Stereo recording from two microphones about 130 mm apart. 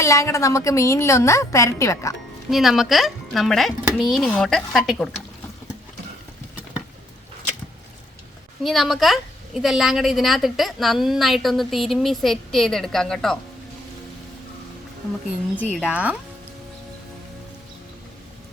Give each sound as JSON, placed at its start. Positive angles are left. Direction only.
{"t": 0.0, "sound": "a woman's voice", "side_deg": 25}
{"t": 2.5, "sound": "a woman's voice", "side_deg": 0}
{"t": 8.6, "sound": "a woman's voice", "side_deg": 0}
{"t": 15.6, "sound": "speech", "side_deg": -10}